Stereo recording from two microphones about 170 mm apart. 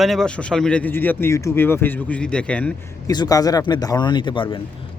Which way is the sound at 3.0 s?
20° left (ahead or behind).